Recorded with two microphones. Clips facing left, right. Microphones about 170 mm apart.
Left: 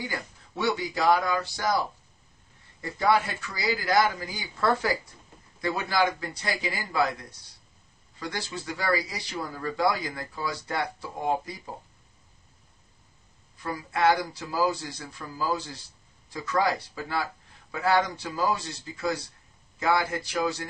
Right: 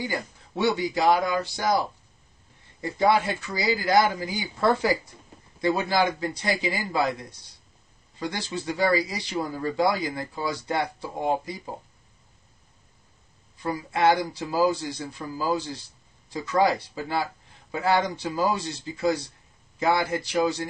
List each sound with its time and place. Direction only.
0.1 s speech: 20° right (ahead or behind)
2.8 s speech: 20° right (ahead or behind)
13.6 s speech: 25° right (ahead or behind)